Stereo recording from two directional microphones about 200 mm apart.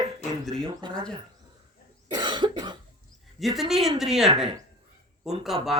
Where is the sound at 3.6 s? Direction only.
Centre (ahead or behind).